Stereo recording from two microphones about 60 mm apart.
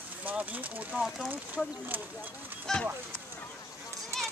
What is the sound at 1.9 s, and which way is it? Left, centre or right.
Speech, right.